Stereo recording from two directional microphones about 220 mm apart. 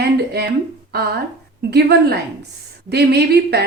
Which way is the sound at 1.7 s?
45° right (ahead or behind).